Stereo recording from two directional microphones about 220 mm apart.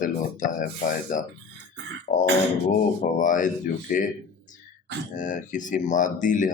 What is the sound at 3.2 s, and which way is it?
Speech, 35° left (ahead or behind).